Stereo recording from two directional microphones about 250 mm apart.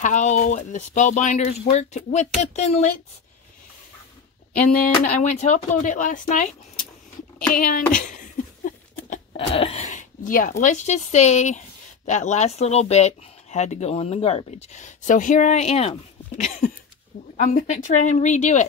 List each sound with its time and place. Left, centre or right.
0.0 s speech: left
4.6 s speech: left
7.5 s speech: left
7.9 s a sound: left
9.1 s speech: left